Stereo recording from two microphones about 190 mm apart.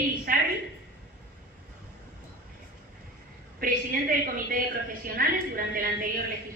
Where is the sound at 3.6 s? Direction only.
45° right (ahead or behind).